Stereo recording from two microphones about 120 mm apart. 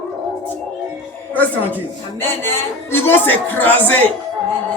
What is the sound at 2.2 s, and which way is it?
A man's voice, 20° left (ahead or behind).